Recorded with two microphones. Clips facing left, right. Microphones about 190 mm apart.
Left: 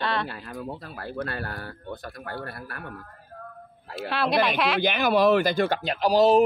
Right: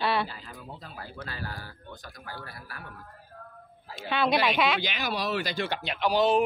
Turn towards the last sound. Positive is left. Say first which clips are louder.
# left 5 dB
turn(degrees=40)  # may be behind; listen again after turning